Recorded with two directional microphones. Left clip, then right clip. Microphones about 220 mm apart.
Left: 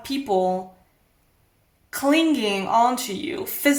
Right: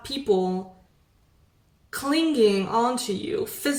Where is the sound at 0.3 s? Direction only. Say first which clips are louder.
Left 2 dB; 20° left (ahead or behind).